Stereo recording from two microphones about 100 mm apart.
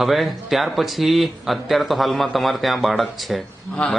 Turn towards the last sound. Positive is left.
turn(degrees=10)  # may be behind; listen again after turning